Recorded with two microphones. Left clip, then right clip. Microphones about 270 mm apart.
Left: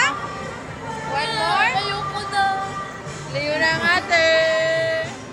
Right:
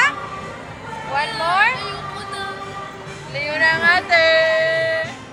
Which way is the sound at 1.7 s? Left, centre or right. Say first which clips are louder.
Left 4 dB; left.